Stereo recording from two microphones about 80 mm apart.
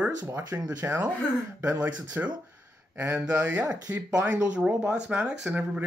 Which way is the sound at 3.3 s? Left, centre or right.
Centre.